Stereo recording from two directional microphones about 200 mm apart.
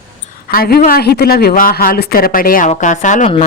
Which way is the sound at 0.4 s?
50° left (ahead or behind).